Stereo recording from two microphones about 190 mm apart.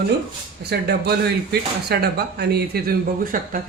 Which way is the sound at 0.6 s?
60° right (ahead or behind).